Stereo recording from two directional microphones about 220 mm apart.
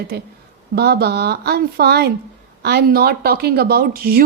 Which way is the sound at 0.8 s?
45° right (ahead or behind).